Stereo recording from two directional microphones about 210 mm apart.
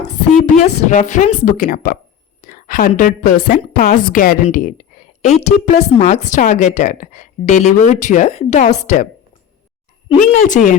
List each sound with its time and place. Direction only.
0.6 s a woman's voice: 35° left (ahead or behind)
10.1 s a woman's voice: 35° left (ahead or behind)